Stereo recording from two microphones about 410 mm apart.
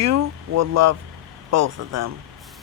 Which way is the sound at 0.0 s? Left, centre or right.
Right.